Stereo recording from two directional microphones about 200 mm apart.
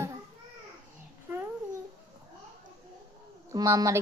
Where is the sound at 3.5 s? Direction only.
15° right (ahead or behind).